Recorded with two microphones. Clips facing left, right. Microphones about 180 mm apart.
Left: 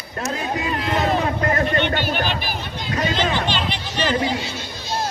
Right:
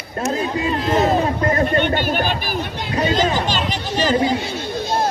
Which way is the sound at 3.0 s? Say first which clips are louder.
Right 4 dB; 35° right (ahead or behind).